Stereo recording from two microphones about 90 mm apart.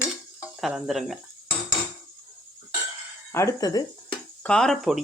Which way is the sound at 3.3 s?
35° left (ahead or behind).